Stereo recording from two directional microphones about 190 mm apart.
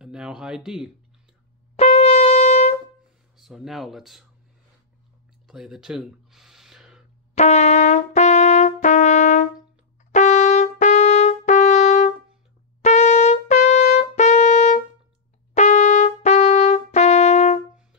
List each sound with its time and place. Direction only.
0.0 s a sound: 5° right (ahead or behind)
1.8 s shofar: 35° left (ahead or behind)
3.3 s speech: centre (ahead or behind)
5.5 s a sound: centre (ahead or behind)
7.3 s brass instrument: 35° left (ahead or behind)
12.8 s trumpet: 40° left (ahead or behind)